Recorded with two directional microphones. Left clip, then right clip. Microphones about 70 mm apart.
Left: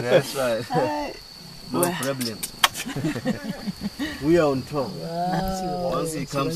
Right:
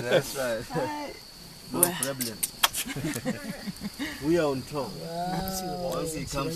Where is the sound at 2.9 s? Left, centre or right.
Right.